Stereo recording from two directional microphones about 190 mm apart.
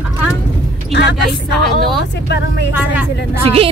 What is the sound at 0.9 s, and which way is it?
Speech, 65° left (ahead or behind).